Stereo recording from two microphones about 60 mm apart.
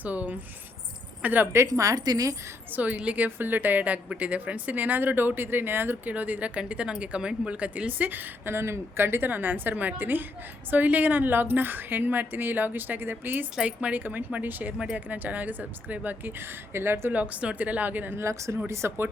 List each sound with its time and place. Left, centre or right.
0.0 s a woman's voice: right
1.6 s speech: right
2.7 s a woman's voice: right
13.6 s a woman's voice: right
16.7 s speech: right
17.1 s a woman's voice: right
18.2 s speech: right